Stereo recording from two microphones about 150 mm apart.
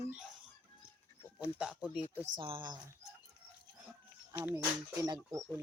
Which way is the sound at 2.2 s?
30° right (ahead or behind).